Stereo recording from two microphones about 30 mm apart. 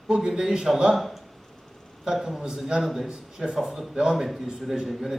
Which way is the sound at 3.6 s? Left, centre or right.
Centre.